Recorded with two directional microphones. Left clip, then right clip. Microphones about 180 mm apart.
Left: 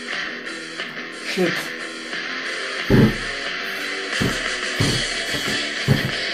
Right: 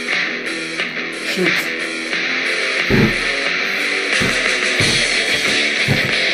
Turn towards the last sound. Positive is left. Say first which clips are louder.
# right 7 dB
turn(degrees=-30)  # may be behind; listen again after turning